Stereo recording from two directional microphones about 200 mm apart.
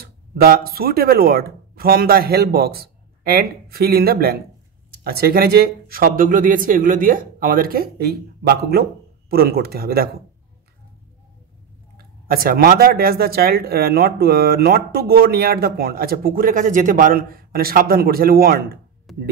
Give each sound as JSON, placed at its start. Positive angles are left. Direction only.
{"t": 0.0, "sound": "speech", "side_deg": -50}
{"t": 12.0, "sound": "speech", "side_deg": -45}
{"t": 19.1, "sound": "speech", "side_deg": 0}